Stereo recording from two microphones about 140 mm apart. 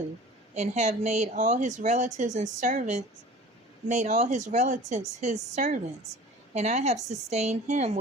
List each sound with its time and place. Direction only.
0.5 s speech: 55° right (ahead or behind)